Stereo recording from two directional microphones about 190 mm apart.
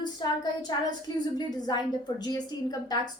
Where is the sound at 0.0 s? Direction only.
20° left (ahead or behind).